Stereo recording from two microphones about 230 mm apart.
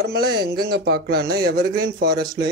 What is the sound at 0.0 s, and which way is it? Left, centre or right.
A man's voice, right.